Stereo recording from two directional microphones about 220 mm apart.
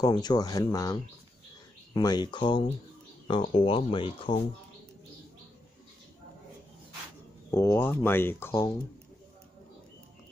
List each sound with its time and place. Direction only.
0.0 s speech: 20° left (ahead or behind)
2.0 s speech: 20° left (ahead or behind)
7.5 s speech: 10° left (ahead or behind)